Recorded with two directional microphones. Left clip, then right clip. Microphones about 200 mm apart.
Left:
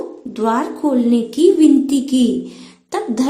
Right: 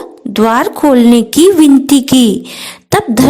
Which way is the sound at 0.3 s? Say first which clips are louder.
Right 8 dB; 50° right (ahead or behind).